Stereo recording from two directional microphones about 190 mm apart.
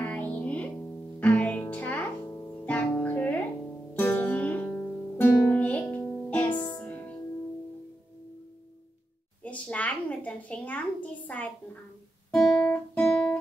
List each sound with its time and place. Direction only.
0.0 s music: 10° left (ahead or behind)
6.5 s music: 25° left (ahead or behind)
6.8 s music: 10° left (ahead or behind)
9.4 s a child's voice: 5° left (ahead or behind)
12.3 s guitar: 5° left (ahead or behind)